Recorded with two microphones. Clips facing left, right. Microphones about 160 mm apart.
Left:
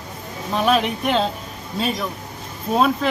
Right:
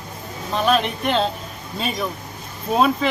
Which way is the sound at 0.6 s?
5° left (ahead or behind).